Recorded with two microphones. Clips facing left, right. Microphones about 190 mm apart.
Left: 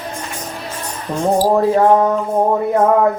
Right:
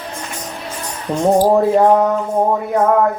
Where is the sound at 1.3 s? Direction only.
20° right (ahead or behind).